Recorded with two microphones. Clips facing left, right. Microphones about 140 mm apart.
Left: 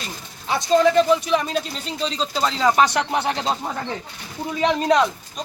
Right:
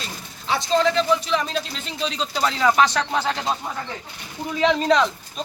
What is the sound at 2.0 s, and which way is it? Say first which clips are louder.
Speech: left 1 dB; 30° left (ahead or behind).